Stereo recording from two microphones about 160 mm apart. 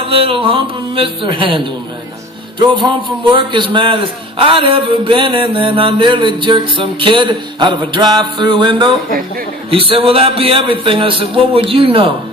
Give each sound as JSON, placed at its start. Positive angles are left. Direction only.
{"t": 0.1, "sound": "mantra", "side_deg": -35}